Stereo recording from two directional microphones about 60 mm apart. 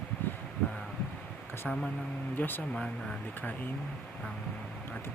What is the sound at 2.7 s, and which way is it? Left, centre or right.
Speech, centre.